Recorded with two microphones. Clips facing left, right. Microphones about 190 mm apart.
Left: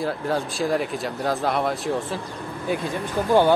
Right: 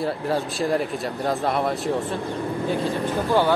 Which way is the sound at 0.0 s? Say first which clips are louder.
Right 1 dB; centre (ahead or behind).